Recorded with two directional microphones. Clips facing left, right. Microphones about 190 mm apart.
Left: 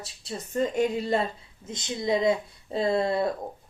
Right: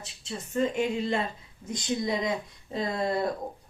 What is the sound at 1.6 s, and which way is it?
Speech, 25° left (ahead or behind).